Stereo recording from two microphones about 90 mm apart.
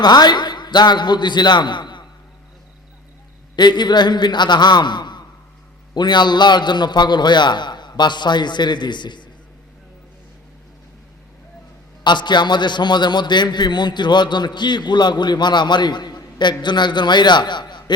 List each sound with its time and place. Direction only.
0.0 s a man's voice: 50° left (ahead or behind)
3.5 s a man's voice: 55° left (ahead or behind)
12.0 s a man's voice: 60° left (ahead or behind)